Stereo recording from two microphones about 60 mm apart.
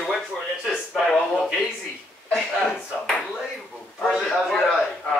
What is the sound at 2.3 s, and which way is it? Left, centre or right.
Chuckle, centre.